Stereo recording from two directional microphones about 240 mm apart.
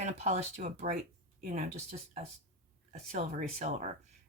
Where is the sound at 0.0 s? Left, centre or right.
Right.